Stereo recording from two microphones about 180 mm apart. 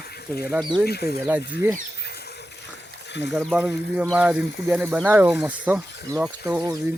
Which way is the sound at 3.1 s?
75° left (ahead or behind).